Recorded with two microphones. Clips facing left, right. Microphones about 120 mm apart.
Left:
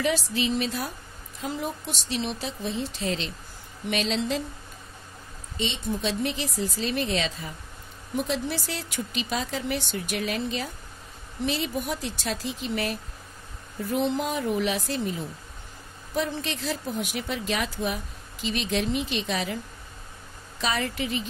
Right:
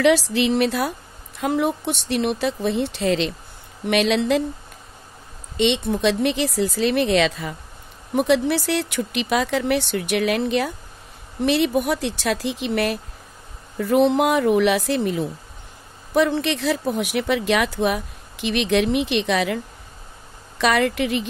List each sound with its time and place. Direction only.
0.0 s speech: 80° right
5.6 s speech: 70° right (ahead or behind)
8.1 s speech: 70° right (ahead or behind)